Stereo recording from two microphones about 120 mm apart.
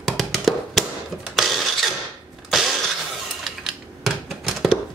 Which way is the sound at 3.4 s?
Centre (ahead or behind).